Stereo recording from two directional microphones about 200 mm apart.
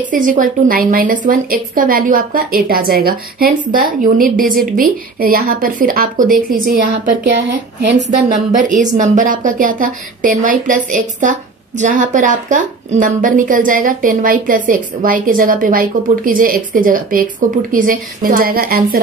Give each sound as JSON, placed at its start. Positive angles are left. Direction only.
{"t": 0.1, "sound": "speech", "side_deg": -40}
{"t": 8.3, "sound": "speech", "side_deg": -40}